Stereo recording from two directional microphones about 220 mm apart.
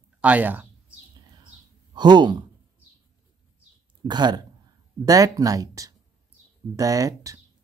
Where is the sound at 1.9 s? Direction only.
20° right (ahead or behind).